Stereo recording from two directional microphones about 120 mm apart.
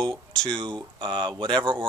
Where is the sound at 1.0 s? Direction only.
40° right (ahead or behind).